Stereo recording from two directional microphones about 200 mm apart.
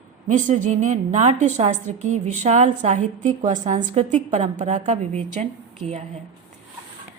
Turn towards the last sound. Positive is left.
turn(degrees=-35)  # may be behind; listen again after turning